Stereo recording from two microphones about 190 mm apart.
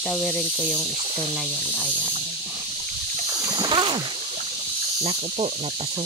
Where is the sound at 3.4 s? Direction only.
25° right (ahead or behind).